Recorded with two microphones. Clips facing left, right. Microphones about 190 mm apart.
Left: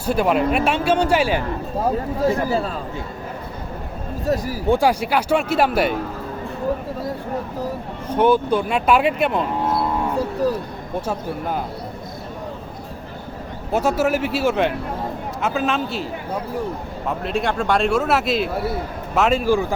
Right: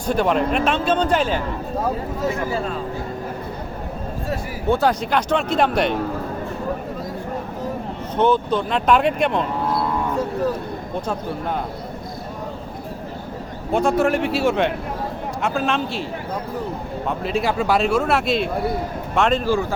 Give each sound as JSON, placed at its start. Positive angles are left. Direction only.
{"t": 0.0, "sound": "speech", "side_deg": 5}
{"t": 2.2, "sound": "speech", "side_deg": 35}
{"t": 4.7, "sound": "speech", "side_deg": 10}
{"t": 8.1, "sound": "speech", "side_deg": 10}
{"t": 11.0, "sound": "speech", "side_deg": 5}
{"t": 13.7, "sound": "speech", "side_deg": 5}
{"t": 17.1, "sound": "speech", "side_deg": 0}